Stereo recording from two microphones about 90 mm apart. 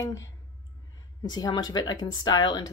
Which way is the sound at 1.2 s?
50° left (ahead or behind).